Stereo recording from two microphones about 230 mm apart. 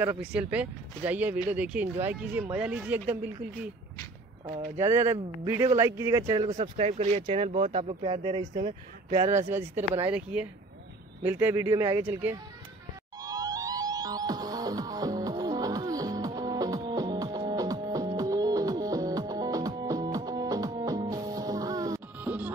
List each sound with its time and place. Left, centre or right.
0.0 s speech: centre
4.7 s speech: centre
6.5 s speech: right
9.5 s speech: centre
13.2 s music: centre